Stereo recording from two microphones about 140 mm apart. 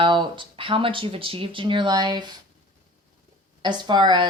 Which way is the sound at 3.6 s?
30° right (ahead or behind).